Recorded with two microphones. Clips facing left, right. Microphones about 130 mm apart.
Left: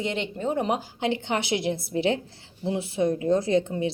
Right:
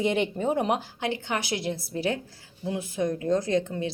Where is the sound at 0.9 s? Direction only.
20° left (ahead or behind).